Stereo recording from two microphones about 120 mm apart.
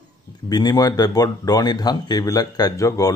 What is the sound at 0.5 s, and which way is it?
A man's voice, 35° left (ahead or behind).